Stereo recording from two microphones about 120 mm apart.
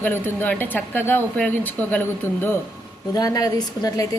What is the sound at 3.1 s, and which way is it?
Speech, 30° left (ahead or behind).